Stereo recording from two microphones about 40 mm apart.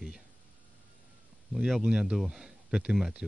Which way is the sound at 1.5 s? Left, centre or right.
Centre.